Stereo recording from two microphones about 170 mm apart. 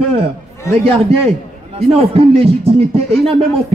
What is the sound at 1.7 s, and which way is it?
A man's voice, 35° right (ahead or behind).